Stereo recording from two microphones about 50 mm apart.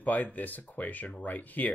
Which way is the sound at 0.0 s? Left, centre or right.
Left.